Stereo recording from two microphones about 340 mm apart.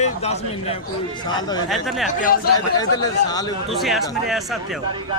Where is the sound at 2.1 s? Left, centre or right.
Left.